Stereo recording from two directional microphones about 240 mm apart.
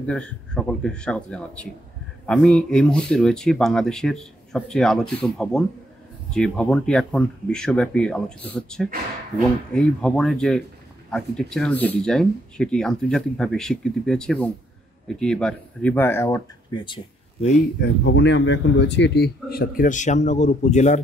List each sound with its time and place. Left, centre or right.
0.0 s speech: centre; by 17.6 s left
17.8 s speech: left